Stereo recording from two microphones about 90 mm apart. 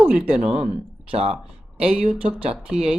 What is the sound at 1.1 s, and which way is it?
Speech, 90° right.